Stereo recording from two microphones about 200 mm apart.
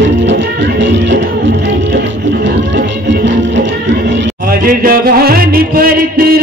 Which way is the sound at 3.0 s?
65° right (ahead or behind).